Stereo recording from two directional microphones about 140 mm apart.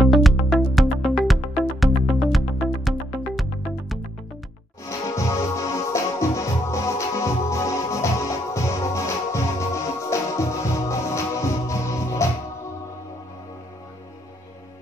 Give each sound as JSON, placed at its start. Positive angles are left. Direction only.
{"t": 0.0, "sound": "music", "side_deg": 0}
{"t": 4.8, "sound": "music", "side_deg": 20}